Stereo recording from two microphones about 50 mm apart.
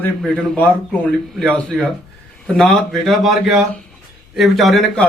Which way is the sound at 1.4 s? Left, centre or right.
Left.